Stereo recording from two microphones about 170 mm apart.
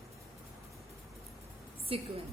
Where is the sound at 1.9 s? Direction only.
35° right (ahead or behind).